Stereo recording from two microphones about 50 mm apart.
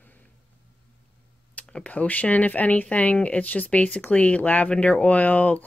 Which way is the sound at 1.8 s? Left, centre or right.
Left.